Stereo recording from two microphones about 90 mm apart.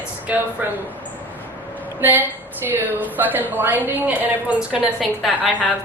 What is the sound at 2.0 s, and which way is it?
A woman's voice, 20° right (ahead or behind).